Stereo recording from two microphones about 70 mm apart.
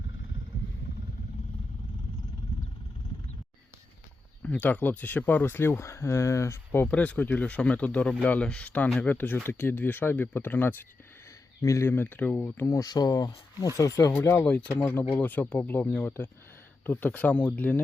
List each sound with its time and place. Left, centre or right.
4.4 s speech: left
6.7 s speech: left
11.6 s speech: left
11.9 s speech: left
12.7 s speech: left
13.7 s speech: left
14.4 s speech: left